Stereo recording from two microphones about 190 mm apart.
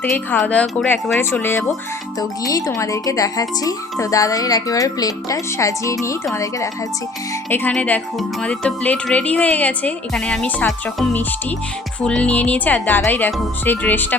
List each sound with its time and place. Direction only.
0.0 s speech: 5° left (ahead or behind)